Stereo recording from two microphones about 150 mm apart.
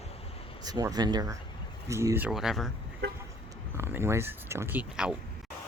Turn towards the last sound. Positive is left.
turn(degrees=-10)  # may be behind; listen again after turning